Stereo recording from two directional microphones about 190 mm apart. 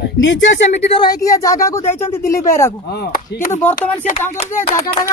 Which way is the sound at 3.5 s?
10° left (ahead or behind).